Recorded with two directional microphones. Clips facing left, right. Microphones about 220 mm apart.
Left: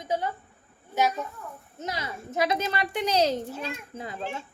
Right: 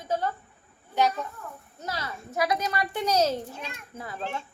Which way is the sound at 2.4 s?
25° left (ahead or behind).